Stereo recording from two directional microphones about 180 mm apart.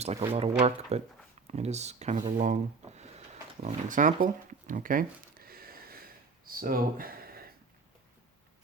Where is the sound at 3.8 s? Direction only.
45° right (ahead or behind).